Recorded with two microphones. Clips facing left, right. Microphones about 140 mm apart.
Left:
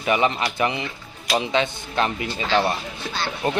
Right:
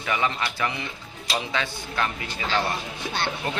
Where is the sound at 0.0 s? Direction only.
20° left (ahead or behind).